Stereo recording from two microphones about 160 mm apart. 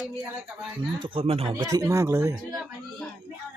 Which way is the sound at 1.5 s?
20° right (ahead or behind).